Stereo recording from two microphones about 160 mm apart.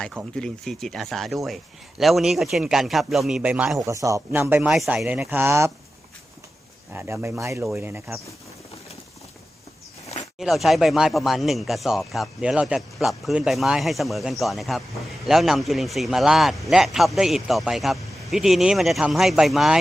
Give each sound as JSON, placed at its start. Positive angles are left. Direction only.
{"t": 0.3, "sound": "speech", "side_deg": 5}
{"t": 3.8, "sound": "speech", "side_deg": -20}
{"t": 6.9, "sound": "speech", "side_deg": -10}
{"t": 10.4, "sound": "speech", "side_deg": 0}